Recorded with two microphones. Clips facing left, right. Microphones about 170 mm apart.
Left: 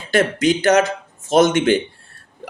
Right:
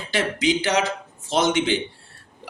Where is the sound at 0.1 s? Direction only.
50° left (ahead or behind).